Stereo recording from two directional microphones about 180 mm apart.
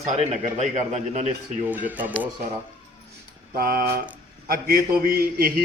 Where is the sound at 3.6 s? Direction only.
55° right (ahead or behind).